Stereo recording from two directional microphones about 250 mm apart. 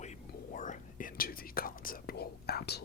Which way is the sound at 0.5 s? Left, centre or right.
Left.